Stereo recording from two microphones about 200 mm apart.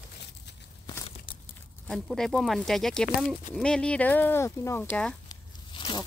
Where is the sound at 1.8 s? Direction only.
Centre (ahead or behind).